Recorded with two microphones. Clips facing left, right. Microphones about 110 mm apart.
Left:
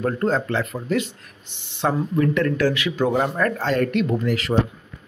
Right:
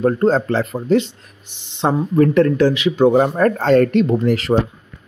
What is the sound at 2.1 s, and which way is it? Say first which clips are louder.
Speech: right 10 dB; 40° right (ahead or behind).